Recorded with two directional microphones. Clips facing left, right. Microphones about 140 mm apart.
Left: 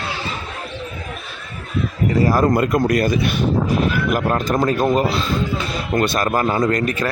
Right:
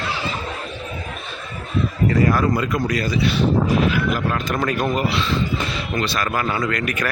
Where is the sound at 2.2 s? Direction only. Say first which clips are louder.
Left 4 dB; 35° left (ahead or behind).